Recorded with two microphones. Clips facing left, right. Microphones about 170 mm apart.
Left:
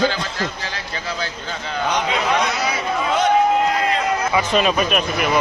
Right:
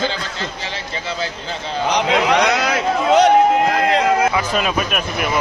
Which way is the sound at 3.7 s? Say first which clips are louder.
Right 4 dB; 85° right.